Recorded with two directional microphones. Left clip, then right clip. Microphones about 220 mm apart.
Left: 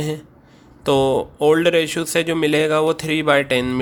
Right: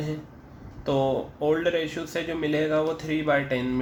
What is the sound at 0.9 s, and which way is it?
Speech, 45° left (ahead or behind).